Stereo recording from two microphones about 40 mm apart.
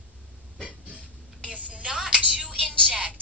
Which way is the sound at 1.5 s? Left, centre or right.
Right.